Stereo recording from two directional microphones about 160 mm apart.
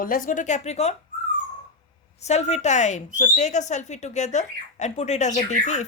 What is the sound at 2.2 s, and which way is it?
Speech, 45° left (ahead or behind).